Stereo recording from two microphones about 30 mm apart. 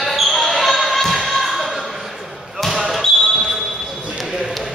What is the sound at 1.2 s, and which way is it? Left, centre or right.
Slam, centre.